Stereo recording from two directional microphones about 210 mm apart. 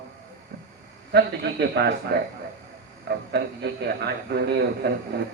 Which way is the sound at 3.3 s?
50° right (ahead or behind).